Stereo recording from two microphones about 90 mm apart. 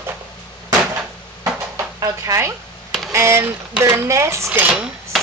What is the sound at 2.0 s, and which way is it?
Speech, 35° right (ahead or behind).